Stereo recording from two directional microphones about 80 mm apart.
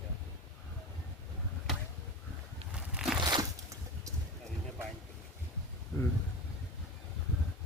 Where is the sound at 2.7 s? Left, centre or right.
Centre.